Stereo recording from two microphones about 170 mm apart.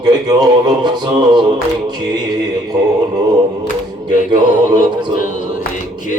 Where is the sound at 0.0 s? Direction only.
25° right (ahead or behind).